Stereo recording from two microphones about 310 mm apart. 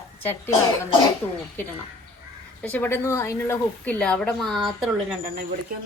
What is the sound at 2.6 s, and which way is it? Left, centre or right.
A woman's voice, centre.